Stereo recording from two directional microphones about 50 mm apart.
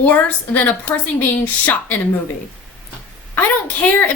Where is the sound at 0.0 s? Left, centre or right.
Left.